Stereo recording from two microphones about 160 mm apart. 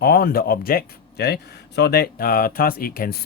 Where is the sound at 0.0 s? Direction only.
70° left (ahead or behind).